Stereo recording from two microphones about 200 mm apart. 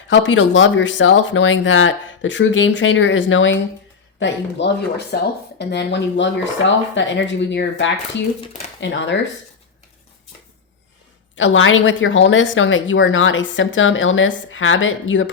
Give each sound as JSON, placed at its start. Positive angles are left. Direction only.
{"t": 0.1, "sound": "speech", "side_deg": 70}
{"t": 11.3, "sound": "speech", "side_deg": 75}